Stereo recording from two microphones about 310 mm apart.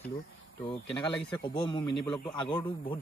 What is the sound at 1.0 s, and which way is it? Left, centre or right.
Speech, centre.